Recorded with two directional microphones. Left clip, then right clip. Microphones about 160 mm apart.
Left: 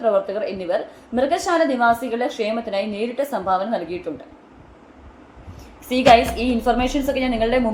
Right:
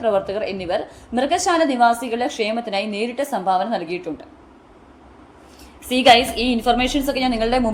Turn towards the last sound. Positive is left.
turn(degrees=-35)  # may be behind; listen again after turning